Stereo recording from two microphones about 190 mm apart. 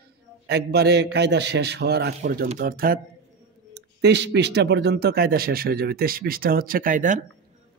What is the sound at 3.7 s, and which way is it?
A man's voice, 65° right (ahead or behind).